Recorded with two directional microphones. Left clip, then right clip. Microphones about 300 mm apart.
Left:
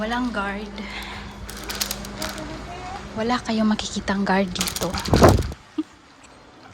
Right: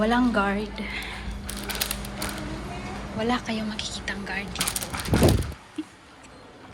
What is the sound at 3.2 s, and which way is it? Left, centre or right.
Speech, centre.